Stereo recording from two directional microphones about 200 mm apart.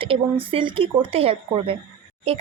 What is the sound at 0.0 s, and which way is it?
Speech, 25° right (ahead or behind).